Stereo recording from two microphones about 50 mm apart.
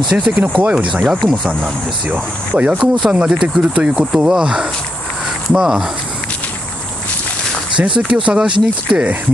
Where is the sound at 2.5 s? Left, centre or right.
Right.